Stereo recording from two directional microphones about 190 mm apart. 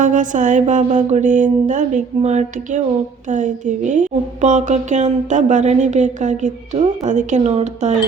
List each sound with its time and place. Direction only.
0.0 s a woman's voice: 40° right (ahead or behind)